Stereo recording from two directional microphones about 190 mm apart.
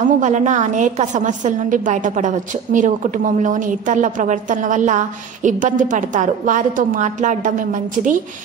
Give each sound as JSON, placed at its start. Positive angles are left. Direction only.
{"t": 0.2, "sound": "a woman's voice", "side_deg": -40}